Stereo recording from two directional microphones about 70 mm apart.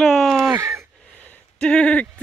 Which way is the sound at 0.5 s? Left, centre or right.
Right.